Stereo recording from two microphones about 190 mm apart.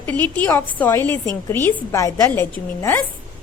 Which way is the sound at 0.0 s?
10° left (ahead or behind).